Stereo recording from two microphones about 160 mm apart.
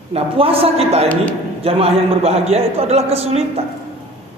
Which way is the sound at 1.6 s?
40° right (ahead or behind).